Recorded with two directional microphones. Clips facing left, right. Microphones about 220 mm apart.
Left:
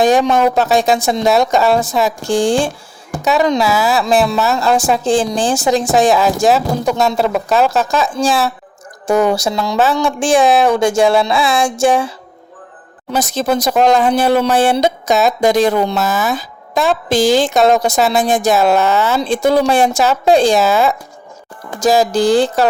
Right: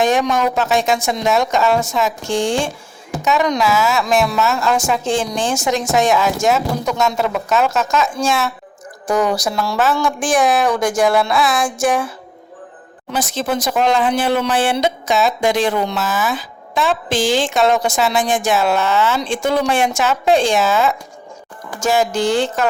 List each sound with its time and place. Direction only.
0.0 s speech: 35° left (ahead or behind)
13.1 s speech: 40° left (ahead or behind)